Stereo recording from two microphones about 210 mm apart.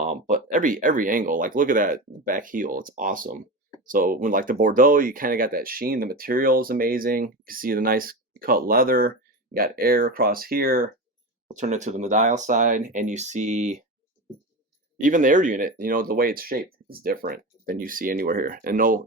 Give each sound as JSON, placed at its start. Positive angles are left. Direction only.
{"t": 0.0, "sound": "speech", "side_deg": -40}
{"t": 15.0, "sound": "speech", "side_deg": -40}